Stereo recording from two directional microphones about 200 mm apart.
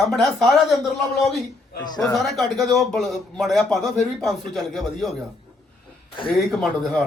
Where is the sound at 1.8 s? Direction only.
20° left (ahead or behind).